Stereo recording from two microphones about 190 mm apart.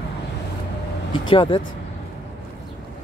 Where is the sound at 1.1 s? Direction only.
25° left (ahead or behind).